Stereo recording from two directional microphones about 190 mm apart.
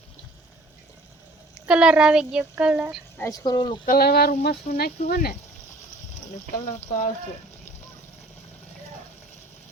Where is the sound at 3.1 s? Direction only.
15° left (ahead or behind).